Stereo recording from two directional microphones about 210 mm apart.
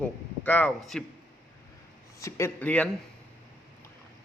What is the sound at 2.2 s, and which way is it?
Speech, 10° left (ahead or behind).